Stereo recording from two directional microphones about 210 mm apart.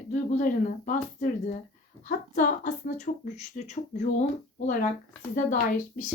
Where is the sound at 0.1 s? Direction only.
35° left (ahead or behind).